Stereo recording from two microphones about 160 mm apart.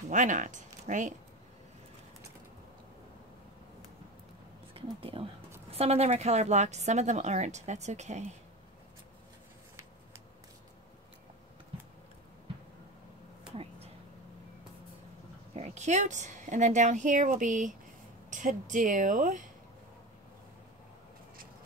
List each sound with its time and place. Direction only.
0.1 s speech: 50° right (ahead or behind)
4.7 s a woman's voice: 35° right (ahead or behind)
13.6 s a sound: 40° right (ahead or behind)
15.5 s a woman's voice: 45° right (ahead or behind)